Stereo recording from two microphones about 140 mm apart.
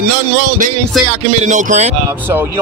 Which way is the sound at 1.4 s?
60° right (ahead or behind).